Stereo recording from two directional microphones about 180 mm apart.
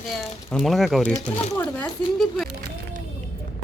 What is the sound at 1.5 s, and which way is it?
Speech, 15° left (ahead or behind).